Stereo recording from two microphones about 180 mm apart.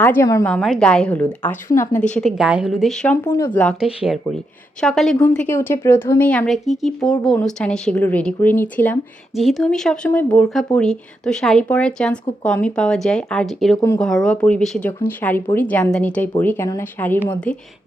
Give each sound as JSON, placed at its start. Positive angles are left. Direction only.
{"t": 0.0, "sound": "speech", "side_deg": 10}
{"t": 0.4, "sound": "speech", "side_deg": 5}
{"t": 2.0, "sound": "speech", "side_deg": 5}